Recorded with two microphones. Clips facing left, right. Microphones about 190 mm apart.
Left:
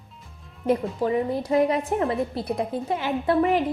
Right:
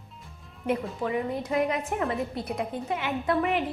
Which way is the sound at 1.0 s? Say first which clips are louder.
Left 5 dB; 35° left (ahead or behind).